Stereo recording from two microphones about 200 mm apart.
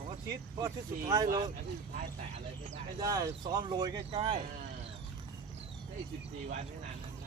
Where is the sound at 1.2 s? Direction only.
45° right (ahead or behind).